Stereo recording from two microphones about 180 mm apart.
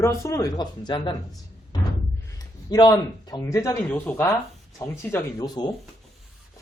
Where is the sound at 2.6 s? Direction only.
25° left (ahead or behind).